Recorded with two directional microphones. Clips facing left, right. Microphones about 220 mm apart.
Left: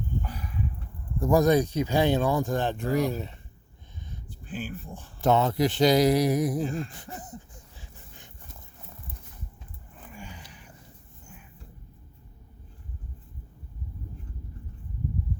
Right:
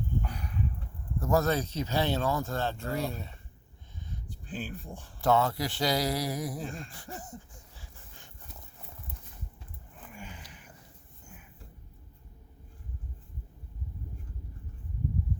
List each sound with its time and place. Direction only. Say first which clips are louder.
1.2 s speech: left 6 dB; 15° left (ahead or behind)
4.4 s speech: left 3 dB; centre (ahead or behind)
5.2 s speech: left 4 dB; 20° left (ahead or behind)
6.6 s gasp: left 9 dB; centre (ahead or behind)
6.9 s speech: left 2 dB; 20° left (ahead or behind)